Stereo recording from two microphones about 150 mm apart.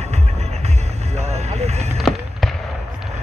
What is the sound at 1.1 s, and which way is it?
Vehicle, 45° right (ahead or behind).